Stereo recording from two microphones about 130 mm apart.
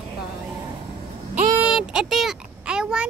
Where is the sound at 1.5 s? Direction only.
5° right (ahead or behind).